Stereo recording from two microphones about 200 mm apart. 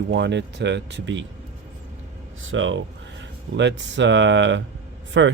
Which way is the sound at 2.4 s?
75° right (ahead or behind).